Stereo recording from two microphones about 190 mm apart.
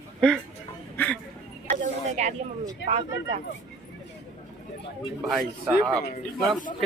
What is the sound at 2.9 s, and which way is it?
Speech, 35° right (ahead or behind).